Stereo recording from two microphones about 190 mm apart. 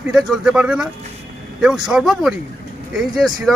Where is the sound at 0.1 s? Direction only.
Centre (ahead or behind).